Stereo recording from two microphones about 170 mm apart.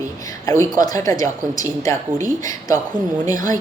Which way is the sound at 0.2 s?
20° left (ahead or behind).